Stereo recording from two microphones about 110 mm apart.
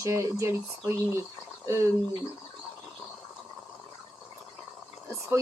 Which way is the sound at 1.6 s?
25° right (ahead or behind).